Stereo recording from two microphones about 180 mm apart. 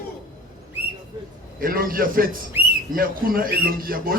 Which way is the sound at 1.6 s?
55° right (ahead or behind).